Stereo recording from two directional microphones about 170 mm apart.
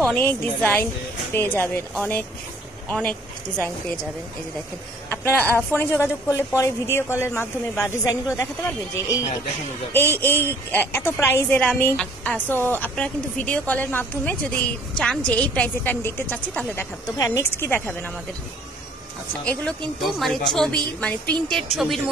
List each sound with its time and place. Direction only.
0.2 s a woman's voice: 10° left (ahead or behind)
5.3 s a woman's voice: 10° left (ahead or behind)
19.4 s speech: 5° left (ahead or behind)